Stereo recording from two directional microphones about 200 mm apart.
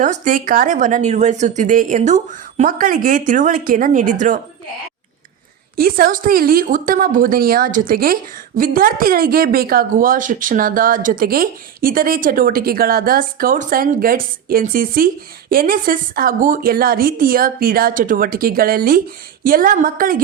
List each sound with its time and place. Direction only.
0.0 s speech: 40° right (ahead or behind)
5.7 s a woman's voice: 45° right (ahead or behind)